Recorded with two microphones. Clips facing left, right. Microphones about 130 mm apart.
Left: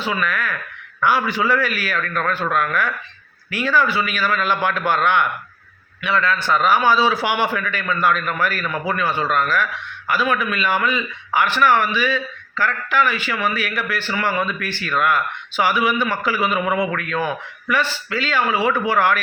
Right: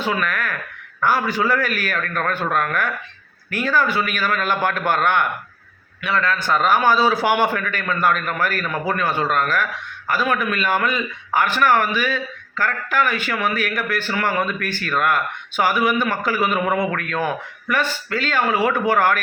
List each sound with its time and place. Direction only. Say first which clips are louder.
0.0 s a man's voice: even; 45° right (ahead or behind)